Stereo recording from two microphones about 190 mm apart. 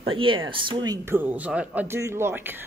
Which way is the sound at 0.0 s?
25° right (ahead or behind).